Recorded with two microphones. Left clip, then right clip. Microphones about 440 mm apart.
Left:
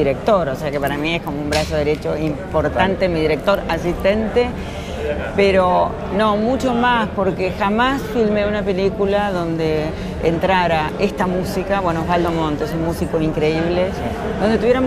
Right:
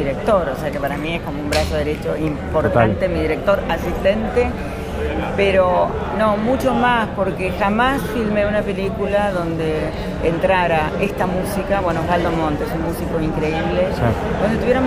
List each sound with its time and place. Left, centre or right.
0.3 s speech: left
2.5 s speech: left